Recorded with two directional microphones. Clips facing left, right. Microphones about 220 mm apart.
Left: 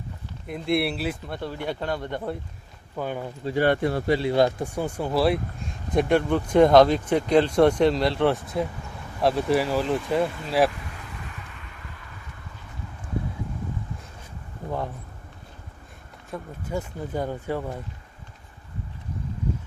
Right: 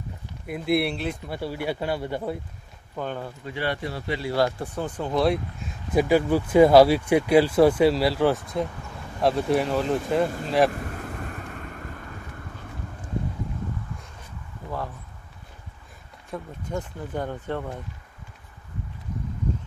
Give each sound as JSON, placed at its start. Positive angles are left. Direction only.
{"t": 0.4, "sound": "speech", "side_deg": -5}
{"t": 1.3, "sound": "speech", "side_deg": -10}
{"t": 2.9, "sound": "speech", "side_deg": 10}
{"t": 3.4, "sound": "speech", "side_deg": 45}
{"t": 4.2, "sound": "speech", "side_deg": 20}
{"t": 10.7, "sound": "vehicle", "side_deg": -45}
{"t": 16.3, "sound": "speech", "side_deg": 5}